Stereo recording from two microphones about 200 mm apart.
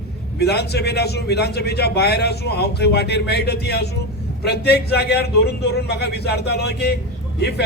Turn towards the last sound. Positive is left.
turn(degrees=55)  # may be behind; listen again after turning